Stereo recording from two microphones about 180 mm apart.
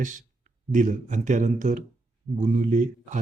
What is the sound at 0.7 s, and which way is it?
Speech, 45° right (ahead or behind).